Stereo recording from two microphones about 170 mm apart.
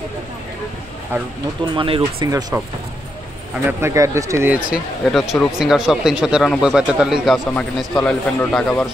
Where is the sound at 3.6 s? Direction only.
15° right (ahead or behind).